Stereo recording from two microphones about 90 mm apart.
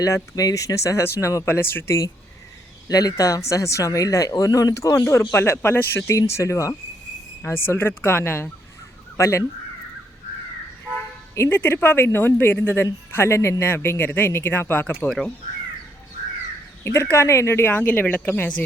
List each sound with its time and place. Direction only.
0.0 s speech: 40° left (ahead or behind)
2.9 s speech: 45° left (ahead or behind)
11.3 s speech: 20° left (ahead or behind)
16.8 s speech: 30° left (ahead or behind)